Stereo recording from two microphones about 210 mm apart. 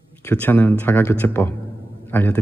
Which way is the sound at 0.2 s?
10° left (ahead or behind).